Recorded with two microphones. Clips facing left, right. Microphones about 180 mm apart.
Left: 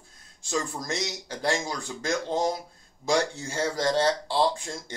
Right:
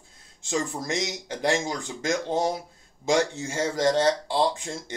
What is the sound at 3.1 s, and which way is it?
Speech, 20° right (ahead or behind).